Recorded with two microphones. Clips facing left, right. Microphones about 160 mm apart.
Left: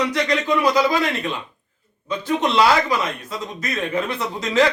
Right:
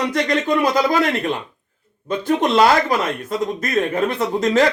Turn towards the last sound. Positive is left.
turn(degrees=-50)  # may be behind; listen again after turning